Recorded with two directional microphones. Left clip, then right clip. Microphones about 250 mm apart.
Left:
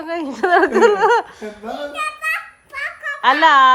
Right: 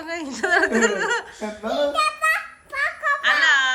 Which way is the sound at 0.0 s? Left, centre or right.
Centre.